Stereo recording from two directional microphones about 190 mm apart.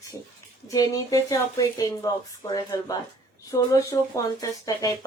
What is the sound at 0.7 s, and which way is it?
Speech, 15° left (ahead or behind).